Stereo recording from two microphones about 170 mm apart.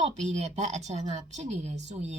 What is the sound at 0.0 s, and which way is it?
A woman's voice, 40° right (ahead or behind).